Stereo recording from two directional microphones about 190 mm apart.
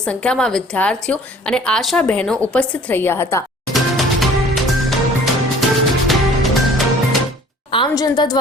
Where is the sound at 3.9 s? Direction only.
Centre (ahead or behind).